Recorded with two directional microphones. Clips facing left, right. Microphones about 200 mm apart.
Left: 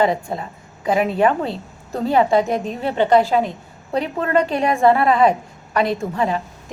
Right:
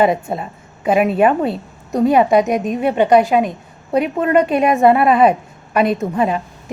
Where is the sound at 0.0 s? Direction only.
20° right (ahead or behind).